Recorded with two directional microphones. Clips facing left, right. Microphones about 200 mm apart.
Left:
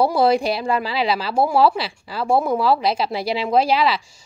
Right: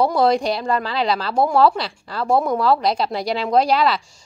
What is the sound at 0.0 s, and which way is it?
A woman's voice, 5° left (ahead or behind).